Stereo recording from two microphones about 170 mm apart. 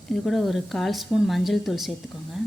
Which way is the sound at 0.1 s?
Centre (ahead or behind).